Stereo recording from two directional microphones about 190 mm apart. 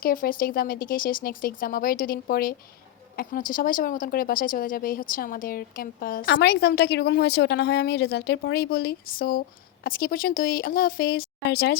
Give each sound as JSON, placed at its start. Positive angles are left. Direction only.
{"t": 0.0, "sound": "speech", "side_deg": 50}
{"t": 6.3, "sound": "a woman's voice", "side_deg": 60}